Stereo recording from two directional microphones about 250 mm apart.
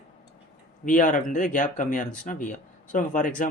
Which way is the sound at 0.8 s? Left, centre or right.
Left.